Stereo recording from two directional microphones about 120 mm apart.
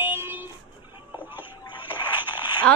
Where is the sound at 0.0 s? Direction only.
15° right (ahead or behind).